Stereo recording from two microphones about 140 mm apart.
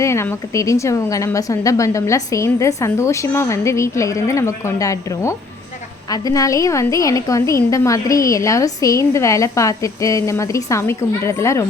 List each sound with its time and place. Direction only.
0.0 s a woman's voice: 20° left (ahead or behind)